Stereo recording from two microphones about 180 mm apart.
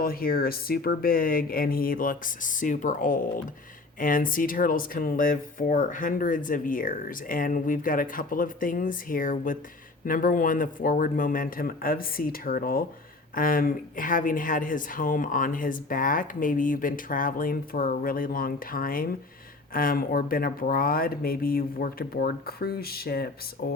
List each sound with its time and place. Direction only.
0.0 s speech: 55° left (ahead or behind)